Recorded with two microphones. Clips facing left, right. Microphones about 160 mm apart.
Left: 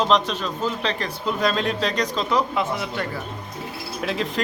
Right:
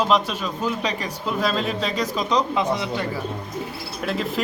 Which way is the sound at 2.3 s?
15° right (ahead or behind).